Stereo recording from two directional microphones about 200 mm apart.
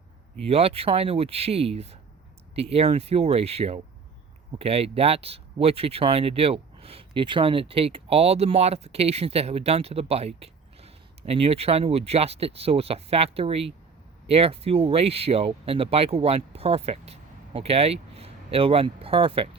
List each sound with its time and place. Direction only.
0.4 s speech: 30° right (ahead or behind)